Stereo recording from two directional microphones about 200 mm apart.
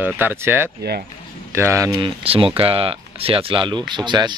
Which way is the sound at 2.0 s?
25° right (ahead or behind).